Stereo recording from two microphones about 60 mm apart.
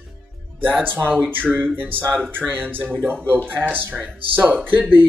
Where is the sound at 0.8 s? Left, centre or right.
Right.